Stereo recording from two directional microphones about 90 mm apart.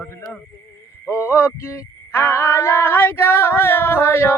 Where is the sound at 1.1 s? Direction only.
30° left (ahead or behind).